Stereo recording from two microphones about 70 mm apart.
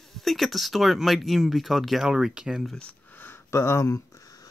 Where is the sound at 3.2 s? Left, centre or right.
Left.